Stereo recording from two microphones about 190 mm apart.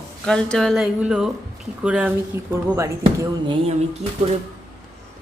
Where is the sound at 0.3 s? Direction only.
5° left (ahead or behind).